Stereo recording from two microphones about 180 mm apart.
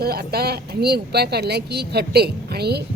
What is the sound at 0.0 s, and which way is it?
A woman's voice, 60° right (ahead or behind).